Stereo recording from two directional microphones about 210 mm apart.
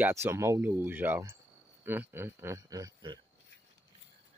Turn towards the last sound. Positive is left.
turn(degrees=-20)  # may be behind; listen again after turning